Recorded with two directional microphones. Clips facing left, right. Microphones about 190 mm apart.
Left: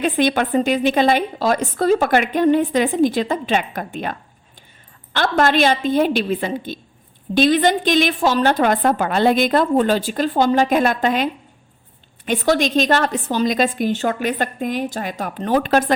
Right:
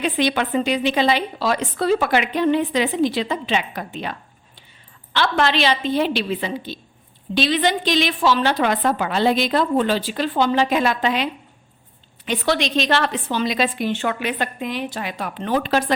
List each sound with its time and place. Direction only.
0.0 s a woman's voice: 50° left (ahead or behind)